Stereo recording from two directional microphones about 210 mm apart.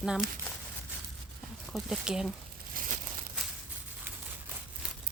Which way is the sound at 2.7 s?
40° right (ahead or behind).